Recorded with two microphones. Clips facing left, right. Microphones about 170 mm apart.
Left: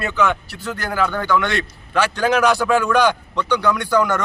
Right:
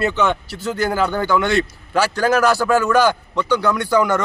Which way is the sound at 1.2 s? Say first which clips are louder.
Right 3 dB; 5° right (ahead or behind).